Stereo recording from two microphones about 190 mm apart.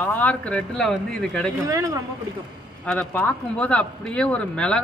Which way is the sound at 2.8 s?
5° left (ahead or behind).